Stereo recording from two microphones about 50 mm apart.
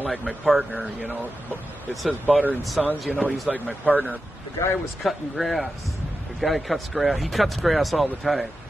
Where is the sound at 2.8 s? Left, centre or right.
Centre.